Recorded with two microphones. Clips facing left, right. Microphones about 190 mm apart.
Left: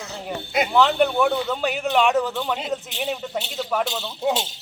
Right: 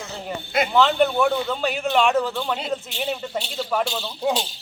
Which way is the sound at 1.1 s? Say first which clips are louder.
Even; centre (ahead or behind).